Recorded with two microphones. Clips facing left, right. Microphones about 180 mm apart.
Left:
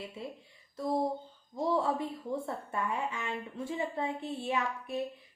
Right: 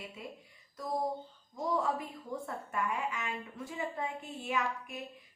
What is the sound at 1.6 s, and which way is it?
A woman's voice, 30° left (ahead or behind).